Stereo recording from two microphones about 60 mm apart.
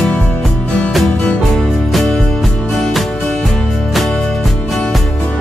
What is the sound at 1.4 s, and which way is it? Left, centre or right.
Music, centre.